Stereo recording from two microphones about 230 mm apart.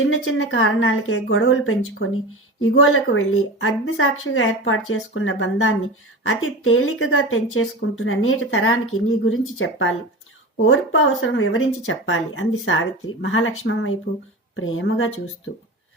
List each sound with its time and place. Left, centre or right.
0.0 s speech: left